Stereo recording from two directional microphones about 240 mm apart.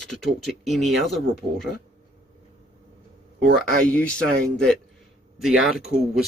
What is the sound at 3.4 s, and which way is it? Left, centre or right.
Speech, right.